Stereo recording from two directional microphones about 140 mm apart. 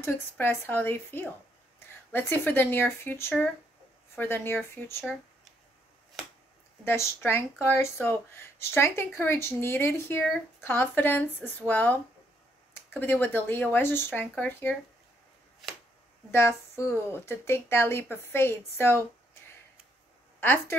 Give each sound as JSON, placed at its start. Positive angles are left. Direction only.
{"t": 0.0, "sound": "speech", "side_deg": 15}
{"t": 6.8, "sound": "a woman's voice", "side_deg": 20}
{"t": 16.3, "sound": "speech", "side_deg": 20}
{"t": 20.3, "sound": "a woman's voice", "side_deg": 15}